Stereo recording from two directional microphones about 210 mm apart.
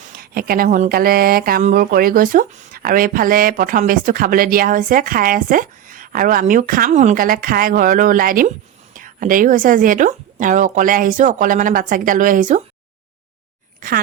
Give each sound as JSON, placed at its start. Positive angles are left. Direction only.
{"t": 0.2, "sound": "speech", "side_deg": -45}
{"t": 13.8, "sound": "speech", "side_deg": -40}